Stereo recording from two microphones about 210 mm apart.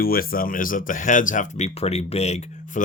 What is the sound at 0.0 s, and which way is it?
Speech, 45° left (ahead or behind).